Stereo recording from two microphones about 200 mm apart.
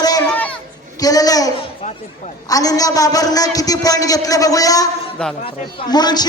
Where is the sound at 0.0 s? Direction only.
20° left (ahead or behind).